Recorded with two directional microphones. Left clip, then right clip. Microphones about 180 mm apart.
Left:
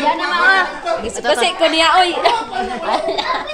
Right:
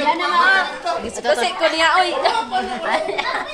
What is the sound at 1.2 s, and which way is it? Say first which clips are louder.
A woman's voice: left 3 dB; 35° left (ahead or behind).